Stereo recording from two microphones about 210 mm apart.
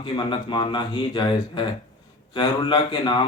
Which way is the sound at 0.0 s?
20° left (ahead or behind).